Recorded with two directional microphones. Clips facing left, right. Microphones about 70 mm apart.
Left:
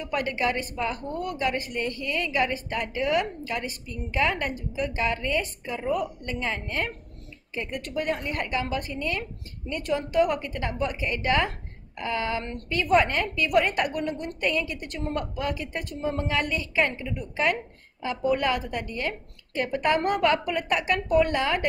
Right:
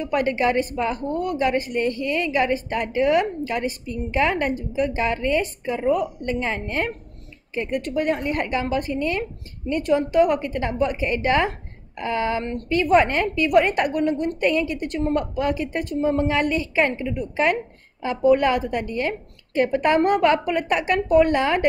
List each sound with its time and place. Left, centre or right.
0.0 s a woman's voice: right